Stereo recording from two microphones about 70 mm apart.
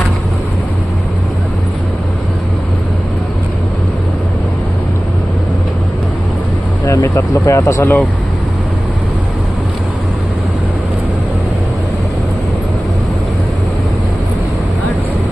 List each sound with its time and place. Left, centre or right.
6.9 s vehicle: left
7.4 s speech: left
7.8 s speech: left